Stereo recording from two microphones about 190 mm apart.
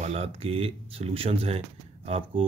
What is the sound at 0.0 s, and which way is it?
Speech, 35° right (ahead or behind).